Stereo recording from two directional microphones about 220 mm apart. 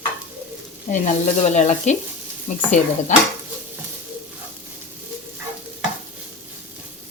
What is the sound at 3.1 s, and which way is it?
Speech, 35° left (ahead or behind).